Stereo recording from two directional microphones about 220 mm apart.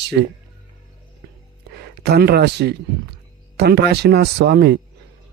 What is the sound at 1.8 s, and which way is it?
Speech, 45° right (ahead or behind).